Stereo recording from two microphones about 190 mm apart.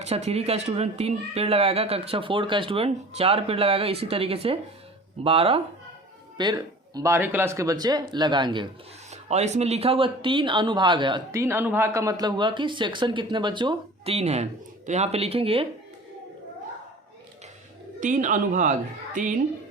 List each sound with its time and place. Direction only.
0.0 s speech: 35° right (ahead or behind)
9.0 s speech: 35° right (ahead or behind)
18.0 s speech: 45° right (ahead or behind)